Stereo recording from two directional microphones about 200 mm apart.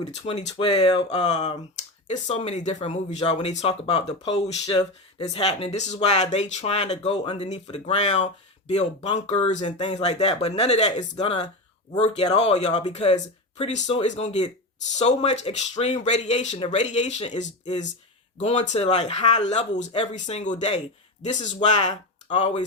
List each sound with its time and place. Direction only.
0.0 s speech: 30° left (ahead or behind)
2.0 s speech: 35° left (ahead or behind)
4.6 s speech: 20° left (ahead or behind)
5.2 s speech: 35° left (ahead or behind)